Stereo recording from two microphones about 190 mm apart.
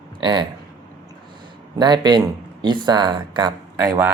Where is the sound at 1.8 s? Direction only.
25° right (ahead or behind).